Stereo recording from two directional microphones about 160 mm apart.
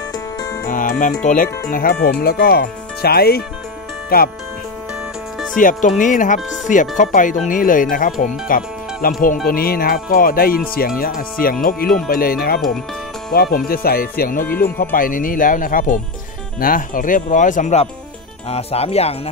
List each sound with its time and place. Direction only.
0.7 s speech: 55° left (ahead or behind); by 3.4 s 75° left (ahead or behind)
5.5 s speech: 55° left (ahead or behind)
18.5 s speech: 40° left (ahead or behind)